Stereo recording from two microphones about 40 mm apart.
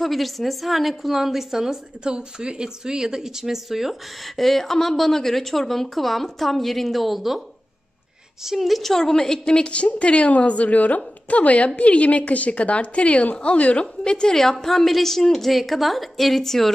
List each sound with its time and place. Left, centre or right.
0.0 s a woman's voice: centre
2.0 s speech: right
4.4 s a woman's voice: centre
8.5 s a woman's voice: centre; by 13.8 s left
14.0 s a woman's voice: centre